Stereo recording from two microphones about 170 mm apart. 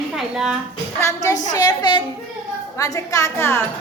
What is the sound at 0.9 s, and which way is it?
A woman's voice, 20° left (ahead or behind).